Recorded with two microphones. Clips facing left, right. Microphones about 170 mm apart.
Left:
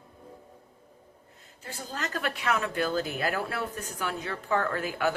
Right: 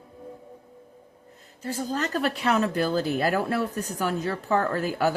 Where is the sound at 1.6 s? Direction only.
40° right (ahead or behind).